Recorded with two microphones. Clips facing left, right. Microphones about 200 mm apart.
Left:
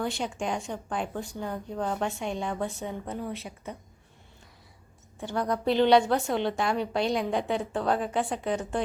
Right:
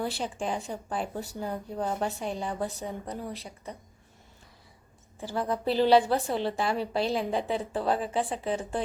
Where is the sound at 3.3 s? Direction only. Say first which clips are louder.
Left 3 dB; 30° right (ahead or behind).